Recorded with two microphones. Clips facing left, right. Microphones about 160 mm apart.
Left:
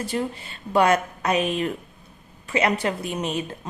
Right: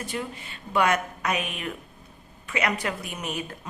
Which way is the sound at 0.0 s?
35° left (ahead or behind).